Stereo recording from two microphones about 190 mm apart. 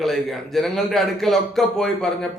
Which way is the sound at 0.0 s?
Centre (ahead or behind).